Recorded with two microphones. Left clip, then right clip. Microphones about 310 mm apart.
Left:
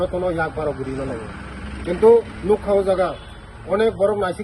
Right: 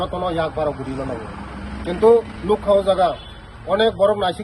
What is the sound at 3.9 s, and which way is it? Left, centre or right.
Speech, right.